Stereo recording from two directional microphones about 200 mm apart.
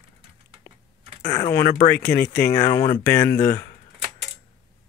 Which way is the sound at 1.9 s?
50° left (ahead or behind).